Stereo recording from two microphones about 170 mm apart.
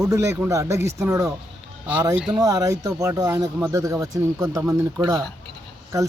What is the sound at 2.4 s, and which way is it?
Speech, 20° right (ahead or behind).